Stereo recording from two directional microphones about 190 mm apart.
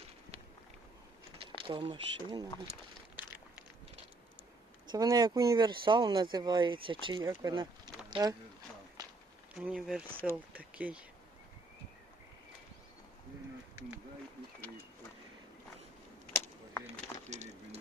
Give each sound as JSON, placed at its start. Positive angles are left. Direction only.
{"t": 1.4, "sound": "speech", "side_deg": -25}
{"t": 4.9, "sound": "speech", "side_deg": -20}
{"t": 9.6, "sound": "speech", "side_deg": -5}
{"t": 17.2, "sound": "bird", "side_deg": -35}